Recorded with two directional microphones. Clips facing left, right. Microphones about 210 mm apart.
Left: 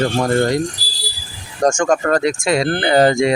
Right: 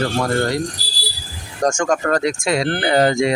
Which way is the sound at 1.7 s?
30° left (ahead or behind).